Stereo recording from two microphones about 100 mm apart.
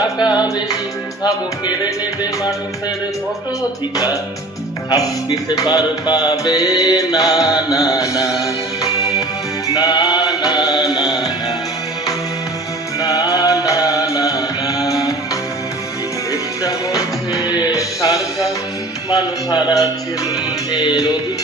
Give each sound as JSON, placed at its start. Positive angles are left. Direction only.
{"t": 0.3, "sound": "music", "side_deg": 45}
{"t": 3.9, "sound": "music", "side_deg": 35}
{"t": 9.7, "sound": "music", "side_deg": 45}
{"t": 13.0, "sound": "music", "side_deg": 40}
{"t": 16.3, "sound": "music", "side_deg": 35}
{"t": 19.1, "sound": "a man's voice", "side_deg": 45}
{"t": 20.7, "sound": "music", "side_deg": 40}